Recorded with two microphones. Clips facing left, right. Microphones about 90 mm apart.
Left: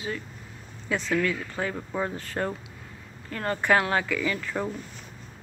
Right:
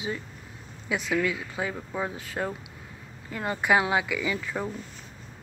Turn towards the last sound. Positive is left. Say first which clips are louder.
# left 1 dB
turn(degrees=-10)  # may be behind; listen again after turning